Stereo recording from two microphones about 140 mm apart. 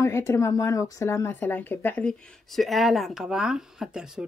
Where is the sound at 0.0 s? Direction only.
20° left (ahead or behind).